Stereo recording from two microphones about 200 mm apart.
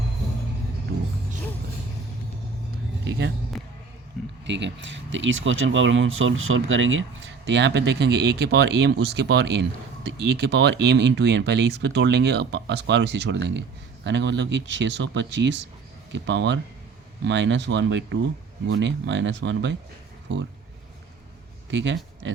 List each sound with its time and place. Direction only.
4.4 s speech: 65° right (ahead or behind)
7.4 s speech: 60° right (ahead or behind)
21.7 s speech: 65° right (ahead or behind)